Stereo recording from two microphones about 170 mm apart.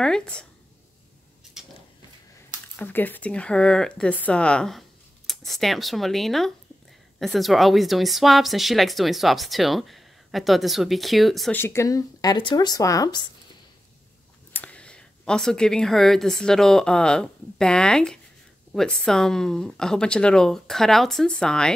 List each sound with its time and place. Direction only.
0.0 s a woman's voice: 5° left (ahead or behind)
1.6 s a sound: centre (ahead or behind)
2.8 s a woman's voice: 10° left (ahead or behind)
11.5 s speech: 15° left (ahead or behind)
14.5 s a woman's voice: 10° left (ahead or behind)